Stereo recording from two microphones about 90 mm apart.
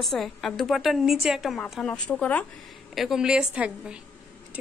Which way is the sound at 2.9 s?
5° right (ahead or behind).